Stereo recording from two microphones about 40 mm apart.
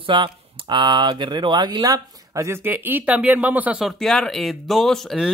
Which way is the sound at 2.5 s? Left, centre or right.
Right.